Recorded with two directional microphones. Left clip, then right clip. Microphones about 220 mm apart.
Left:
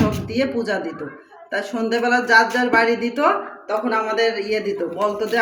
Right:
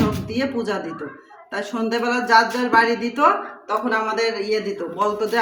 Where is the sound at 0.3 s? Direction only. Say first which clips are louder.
Left 2 dB; 20° right (ahead or behind).